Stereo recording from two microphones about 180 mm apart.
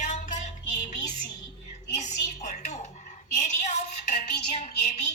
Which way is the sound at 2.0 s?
40° left (ahead or behind).